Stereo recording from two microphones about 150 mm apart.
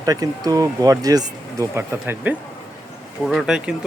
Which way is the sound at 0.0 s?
25° right (ahead or behind).